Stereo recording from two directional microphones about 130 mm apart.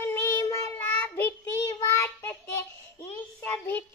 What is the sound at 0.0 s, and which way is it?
Child singing, 20° left (ahead or behind).